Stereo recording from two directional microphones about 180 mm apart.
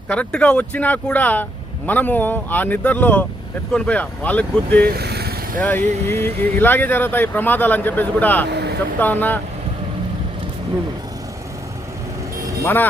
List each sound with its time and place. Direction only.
0.1 s speech: 5° left (ahead or behind)
4.9 s vehicle: 60° right (ahead or behind)
5.5 s speech: 10° left (ahead or behind)
12.6 s speech: 10° left (ahead or behind)